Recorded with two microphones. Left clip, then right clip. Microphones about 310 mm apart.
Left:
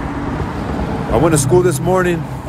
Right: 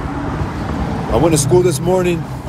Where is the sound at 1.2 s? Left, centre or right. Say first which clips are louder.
Even; centre.